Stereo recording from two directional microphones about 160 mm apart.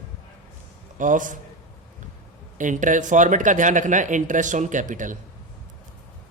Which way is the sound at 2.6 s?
55° right (ahead or behind).